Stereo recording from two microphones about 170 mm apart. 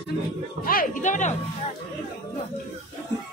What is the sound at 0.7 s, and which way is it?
Music, 50° left (ahead or behind).